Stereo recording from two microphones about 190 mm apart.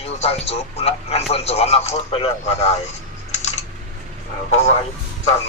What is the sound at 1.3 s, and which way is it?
Speech, 35° left (ahead or behind).